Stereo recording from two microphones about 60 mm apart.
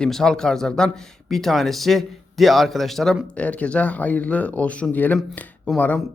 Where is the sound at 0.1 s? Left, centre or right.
Centre.